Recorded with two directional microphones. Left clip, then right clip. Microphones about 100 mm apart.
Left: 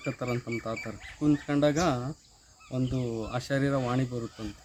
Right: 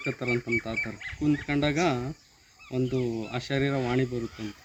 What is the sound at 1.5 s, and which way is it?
Speech, 25° left (ahead or behind).